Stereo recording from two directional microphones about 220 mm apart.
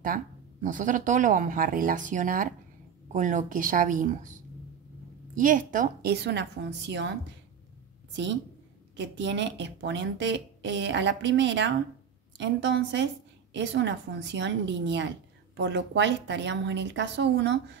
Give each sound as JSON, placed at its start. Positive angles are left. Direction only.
{"t": 0.0, "sound": "a woman's voice", "side_deg": -40}
{"t": 8.9, "sound": "a woman's voice", "side_deg": -55}